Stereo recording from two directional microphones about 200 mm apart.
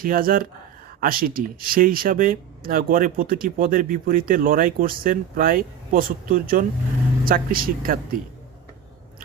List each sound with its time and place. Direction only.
0.0 s speech: 45° right (ahead or behind)